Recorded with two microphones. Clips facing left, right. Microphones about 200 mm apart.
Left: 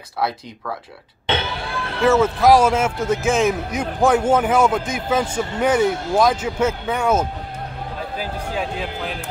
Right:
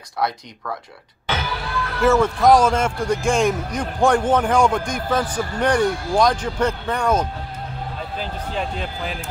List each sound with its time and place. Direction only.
0.2 s a man's voice: 5° left (ahead or behind)
1.2 s music: 25° left (ahead or behind)
2.0 s a man's voice: centre (ahead or behind)
5.2 s speech: 25° left (ahead or behind)
5.6 s speech: 5° left (ahead or behind)